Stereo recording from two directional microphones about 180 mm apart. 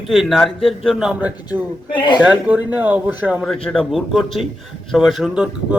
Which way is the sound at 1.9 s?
25° left (ahead or behind).